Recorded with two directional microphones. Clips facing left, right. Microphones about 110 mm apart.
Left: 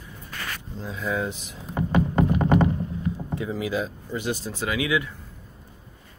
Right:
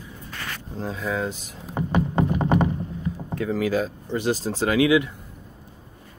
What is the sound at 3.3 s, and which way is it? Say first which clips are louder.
Speech: right 5 dB; 55° right (ahead or behind).